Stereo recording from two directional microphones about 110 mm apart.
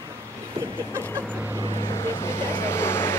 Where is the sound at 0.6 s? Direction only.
55° right (ahead or behind).